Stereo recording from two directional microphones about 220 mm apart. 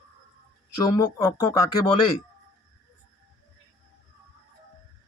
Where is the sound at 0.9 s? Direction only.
15° left (ahead or behind).